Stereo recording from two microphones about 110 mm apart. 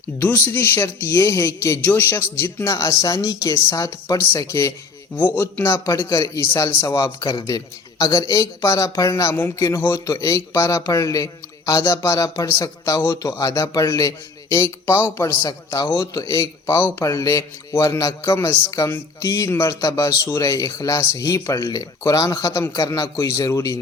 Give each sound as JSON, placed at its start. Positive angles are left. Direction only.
{"t": 0.2, "sound": "a man's voice", "side_deg": 20}
{"t": 14.5, "sound": "a man's voice", "side_deg": 20}